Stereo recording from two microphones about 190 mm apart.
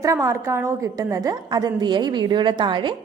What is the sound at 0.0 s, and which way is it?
A woman's voice, 15° right (ahead or behind).